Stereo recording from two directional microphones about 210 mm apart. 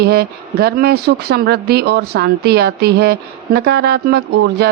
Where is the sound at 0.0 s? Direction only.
45° right (ahead or behind).